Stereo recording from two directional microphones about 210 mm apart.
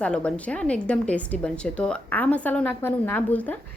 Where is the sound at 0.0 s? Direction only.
5° left (ahead or behind).